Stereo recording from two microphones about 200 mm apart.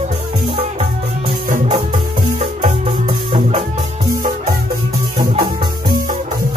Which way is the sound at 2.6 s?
30° right (ahead or behind).